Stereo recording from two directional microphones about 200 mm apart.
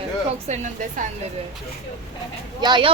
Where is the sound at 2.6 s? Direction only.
25° right (ahead or behind).